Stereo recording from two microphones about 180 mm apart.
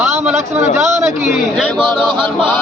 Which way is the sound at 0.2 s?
10° right (ahead or behind).